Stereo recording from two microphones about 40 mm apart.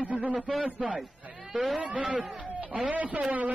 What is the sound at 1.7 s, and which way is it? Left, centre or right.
A man's voice, right.